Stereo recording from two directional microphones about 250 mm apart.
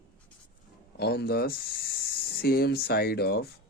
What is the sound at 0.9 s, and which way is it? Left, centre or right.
Speech, left.